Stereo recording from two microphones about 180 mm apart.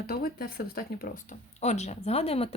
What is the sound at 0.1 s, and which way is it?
Speech, 55° left (ahead or behind).